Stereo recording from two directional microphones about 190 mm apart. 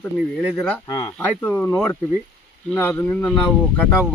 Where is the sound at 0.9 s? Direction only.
10° left (ahead or behind).